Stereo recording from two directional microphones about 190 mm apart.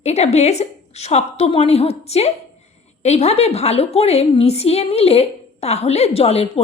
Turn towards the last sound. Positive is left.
turn(degrees=30)  # may be behind; listen again after turning